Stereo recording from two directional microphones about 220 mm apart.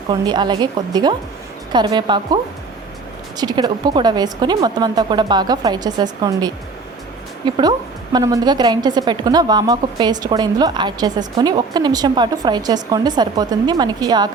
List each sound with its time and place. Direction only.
0.1 s a woman's voice: 20° right (ahead or behind)